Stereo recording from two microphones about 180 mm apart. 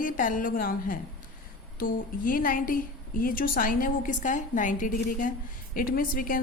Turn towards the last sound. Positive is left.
turn(degrees=50)  # may be behind; listen again after turning